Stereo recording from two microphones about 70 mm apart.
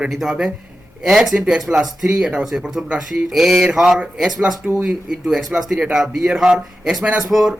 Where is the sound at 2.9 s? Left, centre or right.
Centre.